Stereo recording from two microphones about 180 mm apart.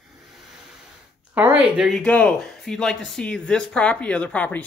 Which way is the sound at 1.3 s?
10° right (ahead or behind).